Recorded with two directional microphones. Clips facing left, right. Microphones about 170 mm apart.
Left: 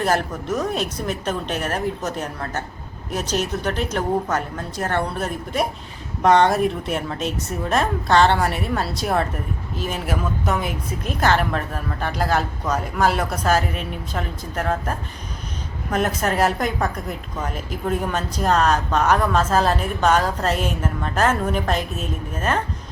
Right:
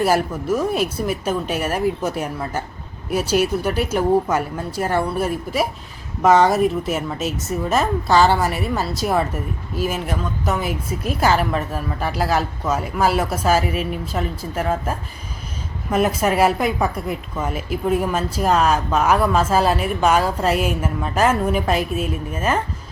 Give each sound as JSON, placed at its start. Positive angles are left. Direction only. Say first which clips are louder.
{"t": 0.0, "sound": "a woman's voice", "louder": "right 3 dB", "side_deg": -10}